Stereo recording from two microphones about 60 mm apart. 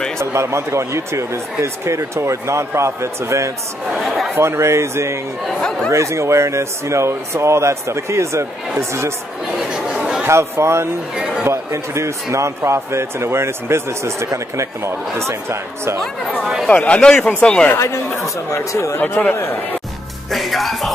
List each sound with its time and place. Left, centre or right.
0.2 s speech: right
3.9 s speech: centre
4.4 s speech: right
9.6 s chatter: centre
10.2 s speech: right
16.0 s music: centre
16.6 s speech: centre
17.7 s speech: left
18.9 s speech: left
20.2 s music: centre